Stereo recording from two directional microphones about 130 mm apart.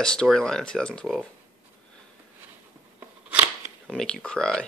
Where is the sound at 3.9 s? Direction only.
5° left (ahead or behind).